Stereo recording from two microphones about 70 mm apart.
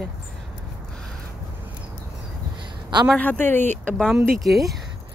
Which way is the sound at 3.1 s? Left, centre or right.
Left.